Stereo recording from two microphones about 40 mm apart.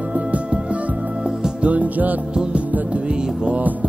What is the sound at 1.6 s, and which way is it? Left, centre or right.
Music, right.